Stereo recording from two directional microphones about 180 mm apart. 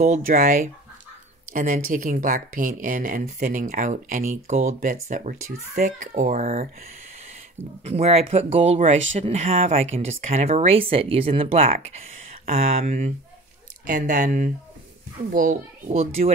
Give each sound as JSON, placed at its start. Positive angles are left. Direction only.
{"t": 0.0, "sound": "speech", "side_deg": -50}
{"t": 4.7, "sound": "speech", "side_deg": -50}
{"t": 7.8, "sound": "speech", "side_deg": -35}